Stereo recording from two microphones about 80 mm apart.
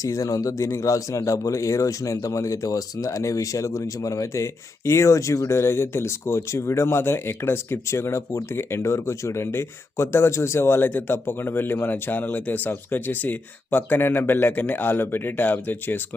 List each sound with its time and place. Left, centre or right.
0.0 s speech: left